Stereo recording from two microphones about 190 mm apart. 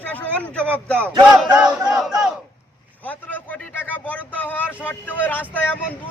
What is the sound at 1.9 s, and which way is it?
Battle cry, 5° right (ahead or behind).